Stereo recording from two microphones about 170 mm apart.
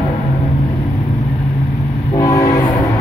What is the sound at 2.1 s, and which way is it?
Train, 20° left (ahead or behind).